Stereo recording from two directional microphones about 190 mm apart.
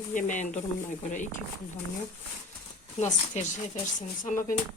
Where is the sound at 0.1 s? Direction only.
40° left (ahead or behind).